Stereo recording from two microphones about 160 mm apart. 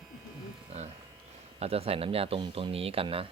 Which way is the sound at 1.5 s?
40° right (ahead or behind).